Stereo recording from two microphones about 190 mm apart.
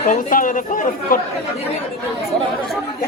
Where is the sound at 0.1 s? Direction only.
45° left (ahead or behind).